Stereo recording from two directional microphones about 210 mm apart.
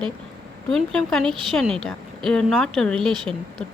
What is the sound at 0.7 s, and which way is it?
A woman's voice, centre (ahead or behind).